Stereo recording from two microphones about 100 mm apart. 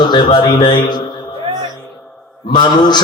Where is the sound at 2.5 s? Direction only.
45° left (ahead or behind).